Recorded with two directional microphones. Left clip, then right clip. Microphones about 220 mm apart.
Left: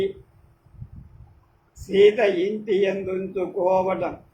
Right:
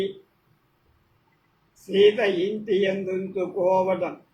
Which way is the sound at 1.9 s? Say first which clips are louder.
Left 2 dB; 15° left (ahead or behind).